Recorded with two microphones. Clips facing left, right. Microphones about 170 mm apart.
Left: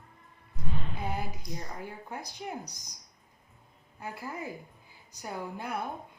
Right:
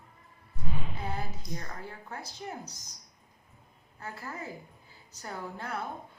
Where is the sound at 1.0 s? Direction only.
15° left (ahead or behind).